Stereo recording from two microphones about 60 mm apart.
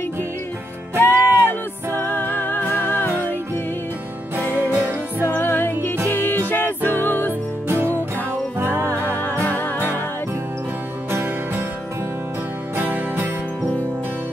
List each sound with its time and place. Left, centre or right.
0.9 s music: left
4.7 s music: right
5.3 s music: left
7.6 s music: right
9.5 s music: left
11.1 s music: right
12.7 s music: right